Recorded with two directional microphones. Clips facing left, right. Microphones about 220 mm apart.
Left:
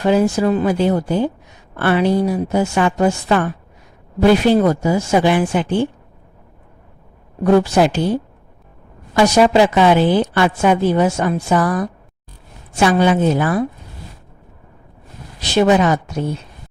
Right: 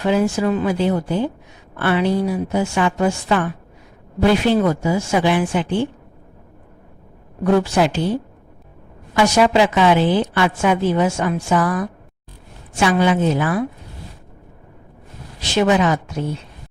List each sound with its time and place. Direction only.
0.0 s a woman's voice: 40° left (ahead or behind)
7.4 s a woman's voice: 40° left (ahead or behind)
9.1 s a woman's voice: 35° left (ahead or behind)
15.4 s a woman's voice: 35° left (ahead or behind)